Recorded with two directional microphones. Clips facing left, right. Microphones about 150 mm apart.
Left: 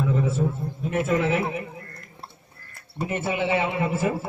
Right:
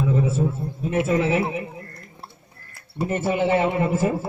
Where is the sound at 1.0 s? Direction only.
25° right (ahead or behind).